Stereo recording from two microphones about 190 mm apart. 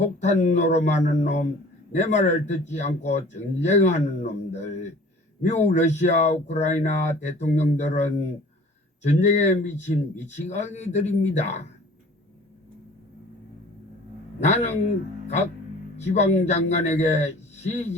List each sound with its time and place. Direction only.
0.2 s speech: 35° left (ahead or behind)
14.4 s speech: 35° left (ahead or behind)
16.0 s speech: 35° left (ahead or behind)